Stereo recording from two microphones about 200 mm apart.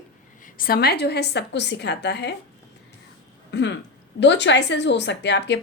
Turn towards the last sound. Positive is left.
turn(degrees=60)  # may be behind; listen again after turning